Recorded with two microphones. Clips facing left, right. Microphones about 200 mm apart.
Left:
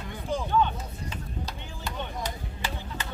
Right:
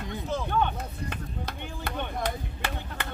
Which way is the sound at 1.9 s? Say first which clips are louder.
Right 3 dB; 60° right (ahead or behind).